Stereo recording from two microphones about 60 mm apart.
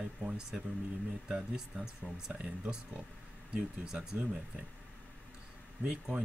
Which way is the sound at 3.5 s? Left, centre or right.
Centre.